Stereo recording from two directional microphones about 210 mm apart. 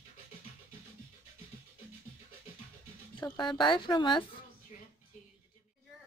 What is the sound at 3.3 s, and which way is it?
Speech, 20° left (ahead or behind).